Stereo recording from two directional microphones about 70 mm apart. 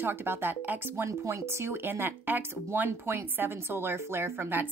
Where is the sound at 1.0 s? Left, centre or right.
Right.